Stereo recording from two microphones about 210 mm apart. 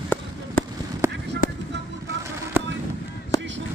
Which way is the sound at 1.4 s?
40° left (ahead or behind).